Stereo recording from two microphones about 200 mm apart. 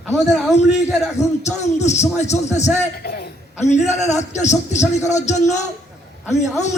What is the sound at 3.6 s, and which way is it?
A man's voice, 35° left (ahead or behind).